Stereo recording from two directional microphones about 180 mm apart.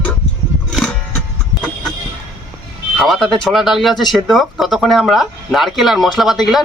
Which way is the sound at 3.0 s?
Centre (ahead or behind).